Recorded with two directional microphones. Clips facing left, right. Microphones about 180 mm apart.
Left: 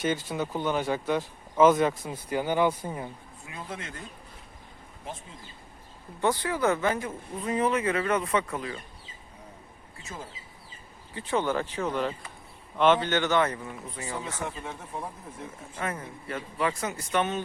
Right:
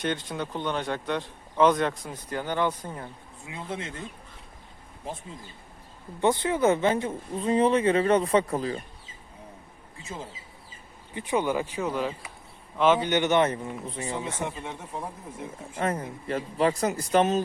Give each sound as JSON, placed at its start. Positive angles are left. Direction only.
{"t": 0.0, "sound": "speech", "side_deg": 5}
{"t": 3.5, "sound": "speech", "side_deg": -25}
{"t": 6.2, "sound": "speech", "side_deg": -20}
{"t": 10.1, "sound": "speech", "side_deg": -20}
{"t": 15.8, "sound": "a man's voice", "side_deg": -35}